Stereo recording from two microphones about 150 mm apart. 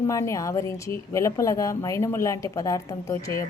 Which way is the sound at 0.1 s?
20° left (ahead or behind).